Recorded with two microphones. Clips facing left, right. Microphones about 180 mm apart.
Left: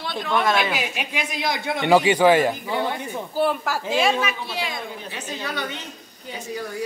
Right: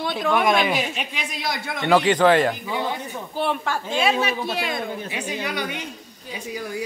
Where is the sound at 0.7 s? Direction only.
10° left (ahead or behind).